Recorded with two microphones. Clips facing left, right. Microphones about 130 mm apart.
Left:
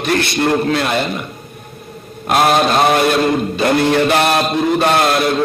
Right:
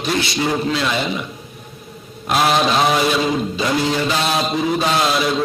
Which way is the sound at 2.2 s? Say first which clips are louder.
Left 3 dB; 55° left (ahead or behind).